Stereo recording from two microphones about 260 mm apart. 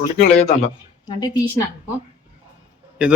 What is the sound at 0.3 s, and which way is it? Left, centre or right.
Speech, left.